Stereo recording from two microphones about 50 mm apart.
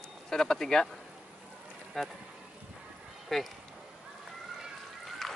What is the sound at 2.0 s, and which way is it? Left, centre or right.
Speech, centre.